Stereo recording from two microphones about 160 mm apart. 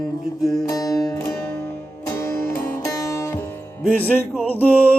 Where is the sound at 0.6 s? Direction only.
20° left (ahead or behind).